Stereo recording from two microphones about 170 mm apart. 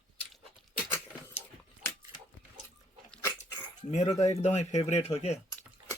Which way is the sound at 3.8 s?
45° left (ahead or behind).